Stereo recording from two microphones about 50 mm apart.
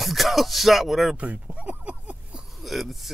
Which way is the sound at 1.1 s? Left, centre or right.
Right.